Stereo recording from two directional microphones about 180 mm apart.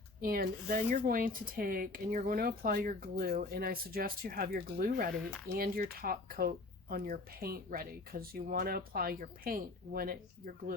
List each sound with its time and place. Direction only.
0.2 s speech: 55° right (ahead or behind)